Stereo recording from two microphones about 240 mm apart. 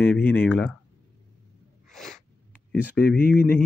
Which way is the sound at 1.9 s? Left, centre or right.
Centre.